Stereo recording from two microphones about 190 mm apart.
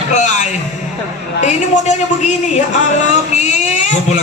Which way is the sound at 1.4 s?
40° left (ahead or behind).